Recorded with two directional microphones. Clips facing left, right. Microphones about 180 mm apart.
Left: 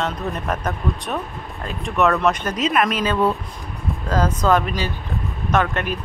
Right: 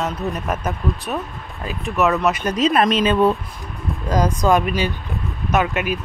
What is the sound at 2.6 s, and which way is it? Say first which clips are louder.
Speech: right 4 dB; 30° right (ahead or behind).